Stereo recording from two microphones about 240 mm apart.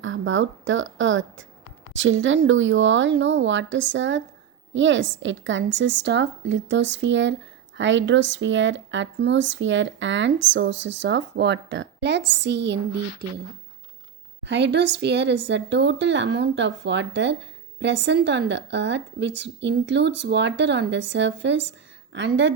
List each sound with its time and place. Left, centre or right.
0.0 s speech: right
14.4 s speech: right